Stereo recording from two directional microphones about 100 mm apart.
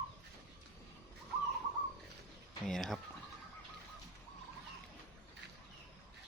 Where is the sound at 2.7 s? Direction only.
Centre (ahead or behind).